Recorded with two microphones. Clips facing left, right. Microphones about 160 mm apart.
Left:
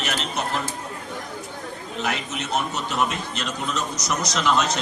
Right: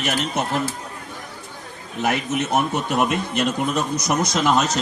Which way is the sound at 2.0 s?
55° right (ahead or behind).